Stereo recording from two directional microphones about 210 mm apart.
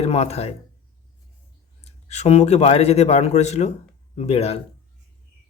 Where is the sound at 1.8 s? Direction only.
30° left (ahead or behind).